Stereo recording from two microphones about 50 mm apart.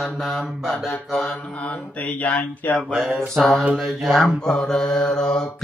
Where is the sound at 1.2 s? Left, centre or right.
Left.